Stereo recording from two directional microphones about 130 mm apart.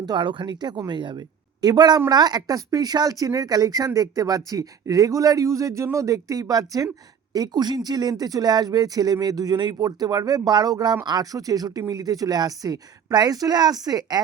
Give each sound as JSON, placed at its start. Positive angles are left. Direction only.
{"t": 0.0, "sound": "speech", "side_deg": -35}